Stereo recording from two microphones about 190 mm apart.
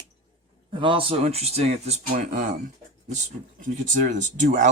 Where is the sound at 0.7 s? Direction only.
25° right (ahead or behind).